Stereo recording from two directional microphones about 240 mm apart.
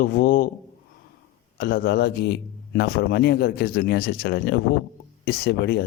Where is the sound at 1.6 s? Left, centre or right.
Left.